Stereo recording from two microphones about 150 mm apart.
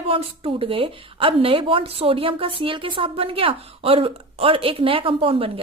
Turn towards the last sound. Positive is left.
turn(degrees=-40)  # may be behind; listen again after turning